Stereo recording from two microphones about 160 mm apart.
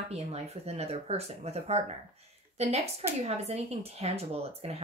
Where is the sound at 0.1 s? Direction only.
40° right (ahead or behind).